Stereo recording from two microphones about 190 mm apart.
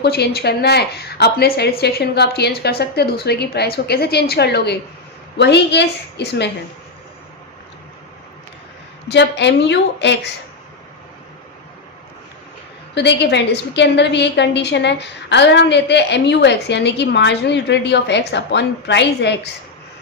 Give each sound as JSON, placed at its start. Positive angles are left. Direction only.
{"t": 0.0, "sound": "a woman's voice", "side_deg": 60}
{"t": 9.0, "sound": "a woman's voice", "side_deg": 65}
{"t": 12.9, "sound": "a woman's voice", "side_deg": 65}